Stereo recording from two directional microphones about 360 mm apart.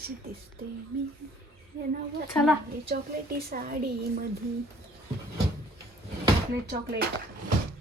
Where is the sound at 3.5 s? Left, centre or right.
Right.